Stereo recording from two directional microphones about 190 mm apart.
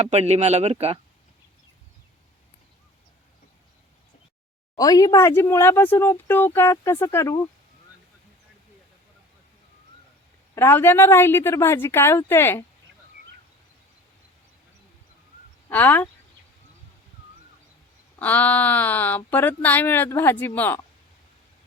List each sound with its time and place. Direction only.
0.0 s speech: 35° right (ahead or behind)
4.8 s speech: 20° left (ahead or behind)
10.5 s speech: 10° left (ahead or behind)
15.7 s speech: 10° left (ahead or behind)
18.2 s speech: 10° left (ahead or behind)